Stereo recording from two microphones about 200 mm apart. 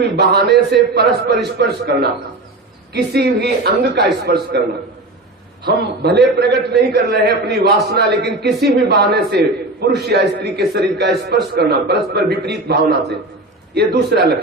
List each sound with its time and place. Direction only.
0.2 s a man's voice: 55° right (ahead or behind)
5.6 s a man's voice: 55° right (ahead or behind)